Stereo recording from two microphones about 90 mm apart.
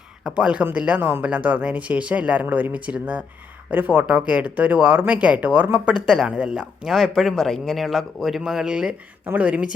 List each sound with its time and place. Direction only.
0.3 s speech: 10° right (ahead or behind)
5.9 s speech: 5° right (ahead or behind)